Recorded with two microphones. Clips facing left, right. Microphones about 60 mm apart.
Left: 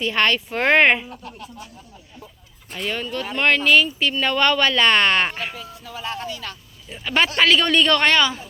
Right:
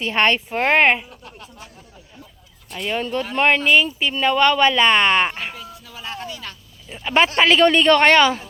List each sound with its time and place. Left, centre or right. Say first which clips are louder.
0.1 s speech: right 3 dB; right
0.5 s speech: left 2 dB; centre
2.7 s speech: right 2 dB; centre
3.0 s speech: right 4 dB; right
4.2 s speech: right 4 dB; centre
6.2 s speech: left 2 dB; centre; by 8.3 s right